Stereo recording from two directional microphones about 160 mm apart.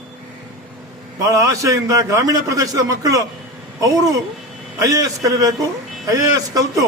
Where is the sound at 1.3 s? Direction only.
20° right (ahead or behind).